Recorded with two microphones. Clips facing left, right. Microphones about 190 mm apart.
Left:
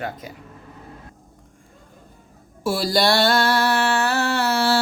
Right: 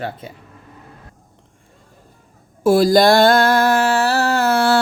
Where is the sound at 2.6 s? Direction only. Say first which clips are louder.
Right 8 dB; 50° right (ahead or behind).